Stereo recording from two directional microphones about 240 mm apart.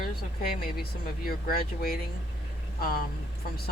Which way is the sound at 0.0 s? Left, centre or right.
Left.